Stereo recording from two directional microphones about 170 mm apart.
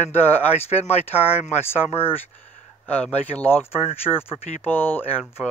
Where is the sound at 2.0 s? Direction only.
15° left (ahead or behind).